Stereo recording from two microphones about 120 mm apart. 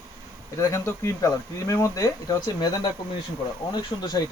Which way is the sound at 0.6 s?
25° left (ahead or behind).